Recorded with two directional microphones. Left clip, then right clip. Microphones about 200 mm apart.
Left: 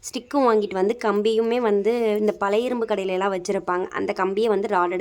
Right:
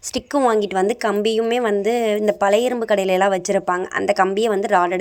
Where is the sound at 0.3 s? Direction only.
5° right (ahead or behind).